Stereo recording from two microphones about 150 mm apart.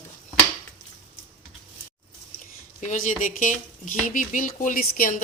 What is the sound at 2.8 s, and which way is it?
A woman's voice, 55° left (ahead or behind).